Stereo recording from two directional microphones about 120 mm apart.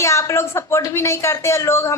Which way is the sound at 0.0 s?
25° left (ahead or behind).